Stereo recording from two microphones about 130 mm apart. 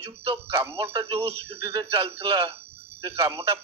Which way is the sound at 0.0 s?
40° right (ahead or behind).